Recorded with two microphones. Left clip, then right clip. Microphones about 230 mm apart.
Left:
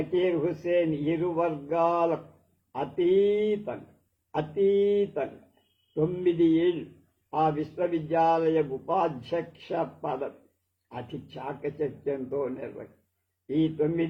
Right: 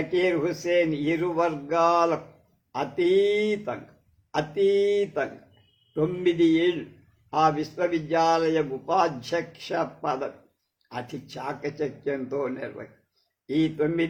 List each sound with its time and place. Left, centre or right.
0.1 s a man's voice: right
4.4 s mantra: right
5.9 s a man's voice: right